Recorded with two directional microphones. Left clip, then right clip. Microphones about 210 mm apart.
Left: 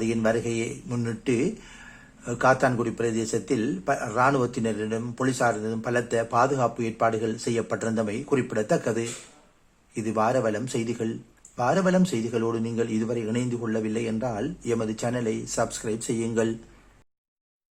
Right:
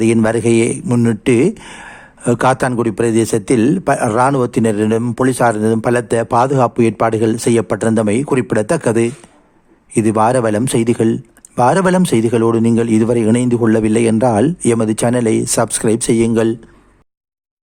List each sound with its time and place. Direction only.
0.0 s speech: 55° right (ahead or behind)